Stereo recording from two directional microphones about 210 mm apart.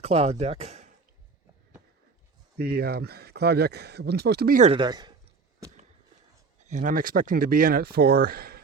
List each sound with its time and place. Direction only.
0.0 s speech: 30° right (ahead or behind)
2.6 s speech: 45° right (ahead or behind)
4.7 s speech: 20° right (ahead or behind)
6.7 s speech: 40° right (ahead or behind)